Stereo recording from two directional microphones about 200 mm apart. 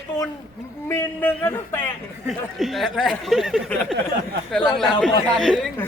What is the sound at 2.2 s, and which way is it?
Speech, centre (ahead or behind).